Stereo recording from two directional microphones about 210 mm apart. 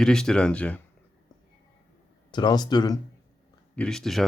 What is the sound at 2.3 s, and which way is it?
Speech, 20° left (ahead or behind).